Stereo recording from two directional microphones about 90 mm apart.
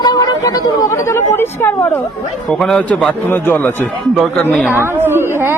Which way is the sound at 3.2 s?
25° left (ahead or behind).